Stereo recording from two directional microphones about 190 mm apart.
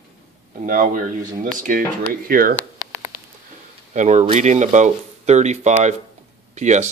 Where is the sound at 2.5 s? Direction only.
10° left (ahead or behind).